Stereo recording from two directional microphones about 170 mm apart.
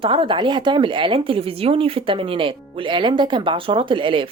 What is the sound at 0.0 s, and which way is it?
Speech, 30° right (ahead or behind).